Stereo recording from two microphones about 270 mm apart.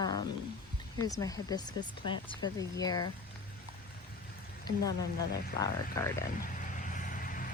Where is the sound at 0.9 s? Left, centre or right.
Centre.